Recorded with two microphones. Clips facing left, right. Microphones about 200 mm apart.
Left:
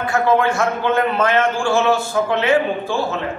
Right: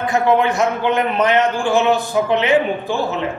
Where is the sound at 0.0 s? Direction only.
20° right (ahead or behind).